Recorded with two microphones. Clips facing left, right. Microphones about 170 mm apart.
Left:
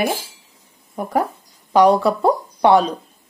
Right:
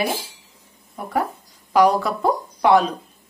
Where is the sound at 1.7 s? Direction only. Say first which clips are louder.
Left 3 dB; 30° left (ahead or behind).